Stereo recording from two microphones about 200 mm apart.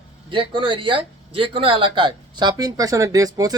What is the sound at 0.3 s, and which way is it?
Speech, 25° right (ahead or behind).